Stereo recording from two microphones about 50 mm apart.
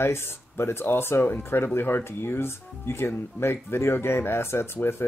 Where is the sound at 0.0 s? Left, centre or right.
Left.